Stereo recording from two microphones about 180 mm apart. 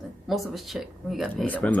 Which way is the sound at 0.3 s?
Centre (ahead or behind).